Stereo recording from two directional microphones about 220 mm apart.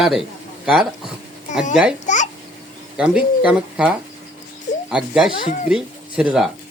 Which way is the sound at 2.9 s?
5° right (ahead or behind).